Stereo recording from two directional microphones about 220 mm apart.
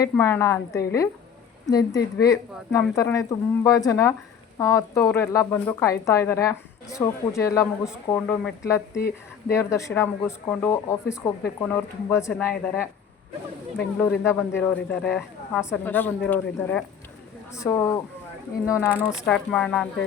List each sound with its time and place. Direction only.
0.0 s speech: 10° left (ahead or behind)
18.9 s speech: centre (ahead or behind)